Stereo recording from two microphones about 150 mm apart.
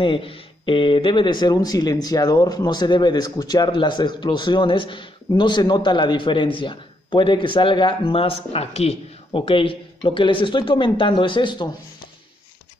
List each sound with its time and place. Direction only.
0.0 s speech: 35° left (ahead or behind)